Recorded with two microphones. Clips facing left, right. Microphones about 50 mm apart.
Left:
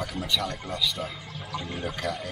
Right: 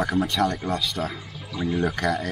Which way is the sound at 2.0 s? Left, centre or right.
Right.